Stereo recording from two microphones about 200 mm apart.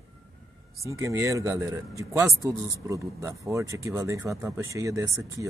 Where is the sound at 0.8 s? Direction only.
15° right (ahead or behind).